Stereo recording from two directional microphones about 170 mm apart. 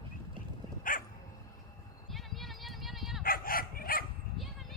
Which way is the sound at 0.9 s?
55° left (ahead or behind).